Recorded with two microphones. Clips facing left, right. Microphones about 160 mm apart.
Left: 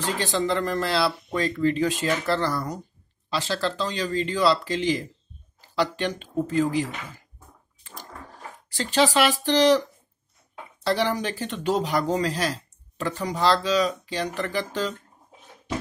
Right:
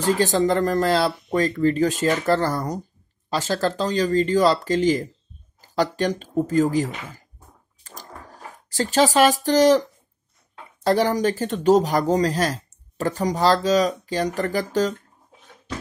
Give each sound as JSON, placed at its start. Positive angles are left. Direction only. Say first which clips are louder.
{"t": 0.0, "sound": "speech", "louder": "right 6 dB", "side_deg": -45}
{"t": 7.8, "sound": "a sound", "louder": "right 1 dB", "side_deg": -40}
{"t": 8.6, "sound": "speech", "louder": "right 3 dB", "side_deg": -40}
{"t": 10.8, "sound": "speech", "louder": "right 5 dB", "side_deg": -45}